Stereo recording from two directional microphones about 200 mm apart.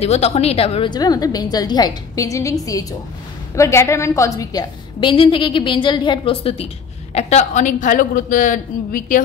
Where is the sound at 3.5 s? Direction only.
15° left (ahead or behind).